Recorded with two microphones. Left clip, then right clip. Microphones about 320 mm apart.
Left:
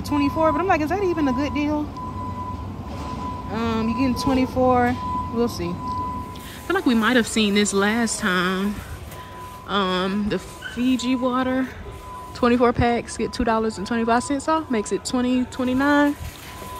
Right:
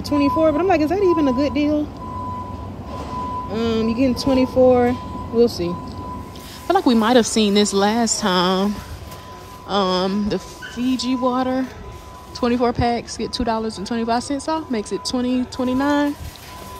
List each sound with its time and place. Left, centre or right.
0.0 s speech: centre
3.0 s music: centre
4.0 s speech: centre
6.7 s speech: centre
9.7 s speech: centre